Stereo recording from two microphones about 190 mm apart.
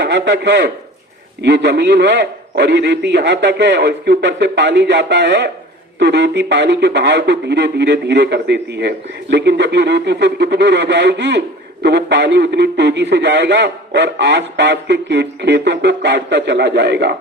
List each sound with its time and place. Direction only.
0.0 s speech: 65° right (ahead or behind)